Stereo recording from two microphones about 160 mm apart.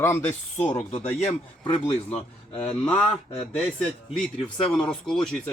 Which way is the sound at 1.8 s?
10° left (ahead or behind).